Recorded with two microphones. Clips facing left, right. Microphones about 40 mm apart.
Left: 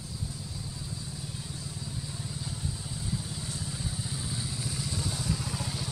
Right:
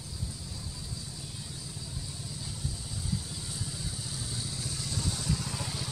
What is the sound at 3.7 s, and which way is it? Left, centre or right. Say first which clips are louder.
Vehicle: left 3 dB; centre.